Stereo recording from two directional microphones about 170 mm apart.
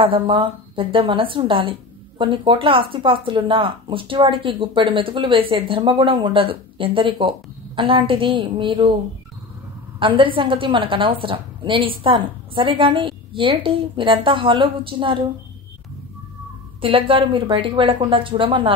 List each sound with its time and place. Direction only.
0.0 s a woman's voice: 30° right (ahead or behind)
9.9 s a woman's voice: 30° right (ahead or behind)
16.8 s a woman's voice: 30° right (ahead or behind)